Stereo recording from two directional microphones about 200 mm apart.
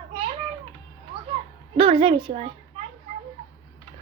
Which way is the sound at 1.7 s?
25° right (ahead or behind).